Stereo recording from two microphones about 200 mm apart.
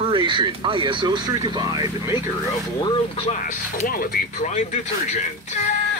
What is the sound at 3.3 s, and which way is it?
Speech, 40° left (ahead or behind).